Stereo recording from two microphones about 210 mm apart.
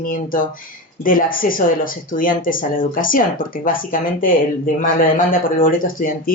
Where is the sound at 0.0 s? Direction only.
40° left (ahead or behind).